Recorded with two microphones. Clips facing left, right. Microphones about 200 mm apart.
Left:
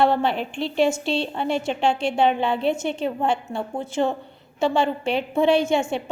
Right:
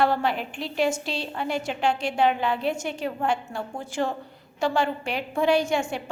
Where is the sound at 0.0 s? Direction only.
25° left (ahead or behind).